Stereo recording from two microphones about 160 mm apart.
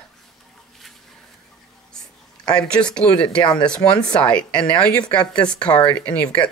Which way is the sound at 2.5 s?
5° left (ahead or behind).